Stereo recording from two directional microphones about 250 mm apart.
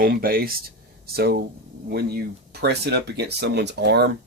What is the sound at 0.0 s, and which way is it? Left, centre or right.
Speech, right.